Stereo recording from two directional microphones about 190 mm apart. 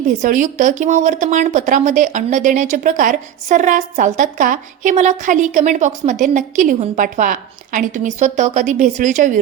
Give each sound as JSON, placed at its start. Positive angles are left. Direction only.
{"t": 0.2, "sound": "speech", "side_deg": -40}